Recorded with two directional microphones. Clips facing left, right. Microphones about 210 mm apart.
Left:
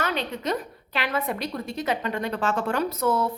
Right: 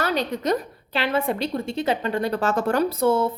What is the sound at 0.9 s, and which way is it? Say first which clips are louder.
Speech: right 4 dB; 30° right (ahead or behind).